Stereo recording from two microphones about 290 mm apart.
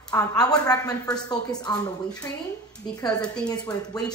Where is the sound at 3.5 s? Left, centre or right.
Centre.